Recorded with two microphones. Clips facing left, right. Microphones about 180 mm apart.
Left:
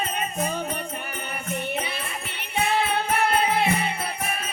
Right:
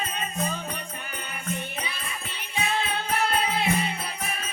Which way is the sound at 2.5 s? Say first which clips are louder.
Left 5 dB; 60° left (ahead or behind).